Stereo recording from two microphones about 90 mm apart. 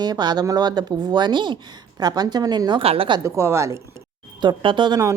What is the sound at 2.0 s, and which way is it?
Speech, 50° right (ahead or behind).